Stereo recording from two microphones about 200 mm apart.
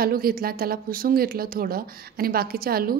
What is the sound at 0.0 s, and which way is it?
A woman's voice, 45° right (ahead or behind).